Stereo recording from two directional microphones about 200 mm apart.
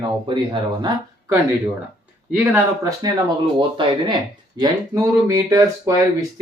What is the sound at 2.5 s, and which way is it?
Speech, 15° right (ahead or behind).